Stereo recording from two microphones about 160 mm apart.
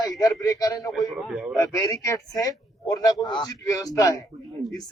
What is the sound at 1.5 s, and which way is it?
A man's voice, 20° left (ahead or behind).